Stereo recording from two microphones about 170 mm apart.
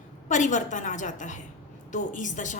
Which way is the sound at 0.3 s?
45° left (ahead or behind).